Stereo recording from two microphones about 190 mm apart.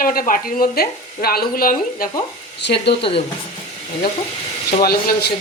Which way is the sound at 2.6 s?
65° left (ahead or behind).